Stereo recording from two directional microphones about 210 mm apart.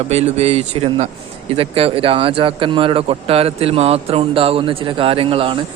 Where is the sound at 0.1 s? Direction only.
30° right (ahead or behind).